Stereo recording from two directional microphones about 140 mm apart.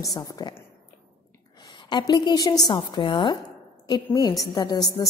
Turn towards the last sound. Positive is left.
turn(degrees=30)  # may be behind; listen again after turning